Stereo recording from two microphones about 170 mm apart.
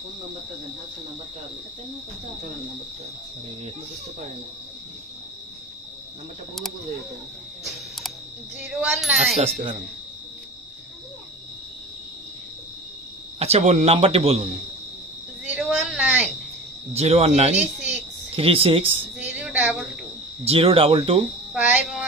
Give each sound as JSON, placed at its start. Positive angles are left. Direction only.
{"t": 8.7, "sound": "speech", "side_deg": -5}
{"t": 13.4, "sound": "a man's voice", "side_deg": -40}
{"t": 15.4, "sound": "a sound", "side_deg": -5}
{"t": 16.9, "sound": "a man's voice", "side_deg": -40}
{"t": 19.1, "sound": "a sound", "side_deg": -5}
{"t": 20.4, "sound": "a man's voice", "side_deg": -35}
{"t": 21.5, "sound": "child singing", "side_deg": -10}